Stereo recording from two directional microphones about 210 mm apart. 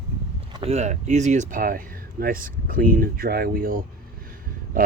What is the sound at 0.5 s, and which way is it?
Speech, 30° right (ahead or behind).